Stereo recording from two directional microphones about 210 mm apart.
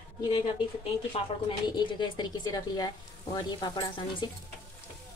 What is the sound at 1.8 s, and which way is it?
A woman's voice, 20° left (ahead or behind).